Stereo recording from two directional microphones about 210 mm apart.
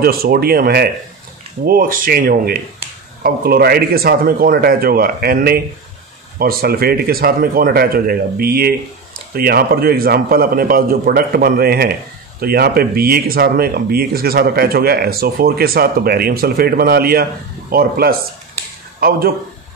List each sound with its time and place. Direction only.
0.0 s a man's voice: 45° right (ahead or behind)